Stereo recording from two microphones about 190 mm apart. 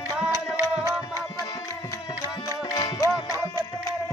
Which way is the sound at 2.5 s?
20° left (ahead or behind).